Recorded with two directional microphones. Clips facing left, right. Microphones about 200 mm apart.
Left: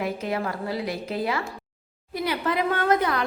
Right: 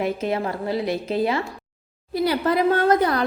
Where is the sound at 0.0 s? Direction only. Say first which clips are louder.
Right 4 dB; 25° right (ahead or behind).